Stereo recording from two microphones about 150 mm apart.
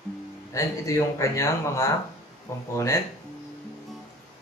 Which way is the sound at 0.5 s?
20° left (ahead or behind).